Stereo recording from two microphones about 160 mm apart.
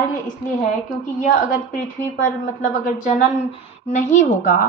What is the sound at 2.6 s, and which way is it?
A woman's voice, 50° left (ahead or behind).